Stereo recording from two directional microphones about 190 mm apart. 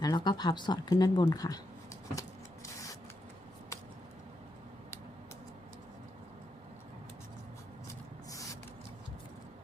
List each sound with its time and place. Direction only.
0.0 s speech: 20° left (ahead or behind)